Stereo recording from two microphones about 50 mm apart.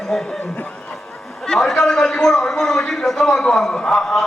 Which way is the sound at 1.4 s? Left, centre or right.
Centre.